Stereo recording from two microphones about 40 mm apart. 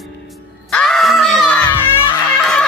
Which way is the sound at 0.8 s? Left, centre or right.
Centre.